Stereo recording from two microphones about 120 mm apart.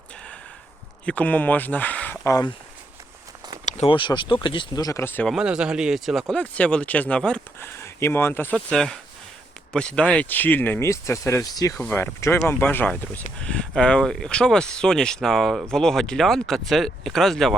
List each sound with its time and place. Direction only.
1.0 s speech: 10° left (ahead or behind)
2.2 s speech: 30° left (ahead or behind)
3.8 s speech: 40° left (ahead or behind); by 5.2 s 20° left (ahead or behind)
5.2 s speech: 5° right (ahead or behind)
7.6 s a sound: 20° left (ahead or behind)
8.5 s speech: 5° left (ahead or behind); by 11.8 s 30° left (ahead or behind)
11.8 s speech: 15° left (ahead or behind)